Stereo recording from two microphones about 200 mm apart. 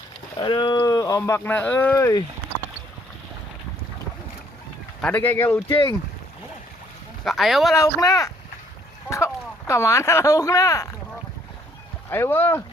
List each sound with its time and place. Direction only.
0.3 s speech: 25° left (ahead or behind)
4.9 s speech: 5° left (ahead or behind)
7.3 s speech: centre (ahead or behind)
7.8 s speech: 15° left (ahead or behind)
12.1 s speech: 10° left (ahead or behind)